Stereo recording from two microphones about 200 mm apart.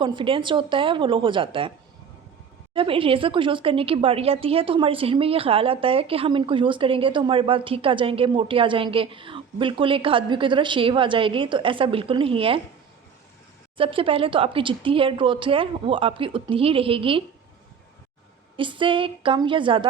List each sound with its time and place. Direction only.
0.0 s speech: 25° right (ahead or behind)
2.7 s speech: 25° right (ahead or behind)
13.7 s speech: 25° right (ahead or behind)
18.5 s speech: 25° right (ahead or behind)